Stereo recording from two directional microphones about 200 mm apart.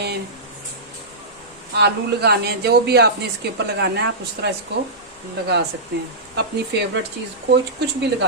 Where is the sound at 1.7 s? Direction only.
55° right (ahead or behind).